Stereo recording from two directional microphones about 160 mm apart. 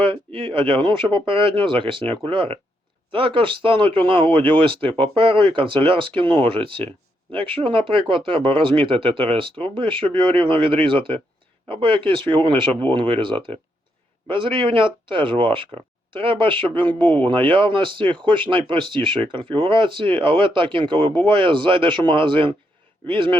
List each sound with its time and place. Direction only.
0.0 s speech: 35° right (ahead or behind)